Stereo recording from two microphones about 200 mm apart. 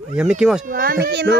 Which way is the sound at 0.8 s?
50° right (ahead or behind).